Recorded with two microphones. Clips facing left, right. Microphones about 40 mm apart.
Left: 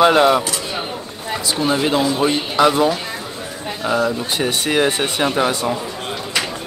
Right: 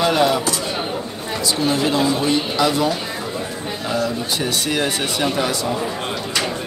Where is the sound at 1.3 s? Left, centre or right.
Centre.